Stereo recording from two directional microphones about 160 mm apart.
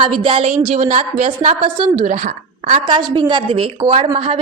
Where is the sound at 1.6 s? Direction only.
30° right (ahead or behind).